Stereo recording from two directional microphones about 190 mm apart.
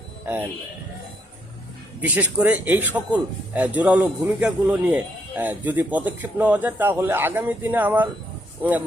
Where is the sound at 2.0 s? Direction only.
5° right (ahead or behind).